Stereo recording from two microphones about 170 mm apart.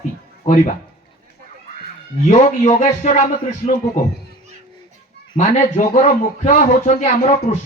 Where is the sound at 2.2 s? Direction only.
45° left (ahead or behind).